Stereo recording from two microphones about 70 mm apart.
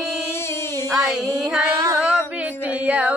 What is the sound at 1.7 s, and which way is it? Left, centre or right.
Female singing, right.